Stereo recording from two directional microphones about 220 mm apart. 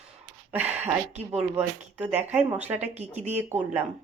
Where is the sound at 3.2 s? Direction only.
30° right (ahead or behind).